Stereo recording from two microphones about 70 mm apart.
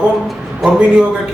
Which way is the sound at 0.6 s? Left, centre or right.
Centre.